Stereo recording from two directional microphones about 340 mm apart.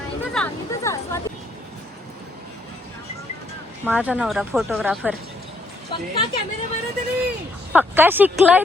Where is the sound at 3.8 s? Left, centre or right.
Centre.